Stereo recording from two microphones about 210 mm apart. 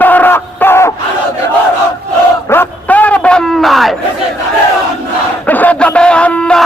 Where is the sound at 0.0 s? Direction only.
10° left (ahead or behind).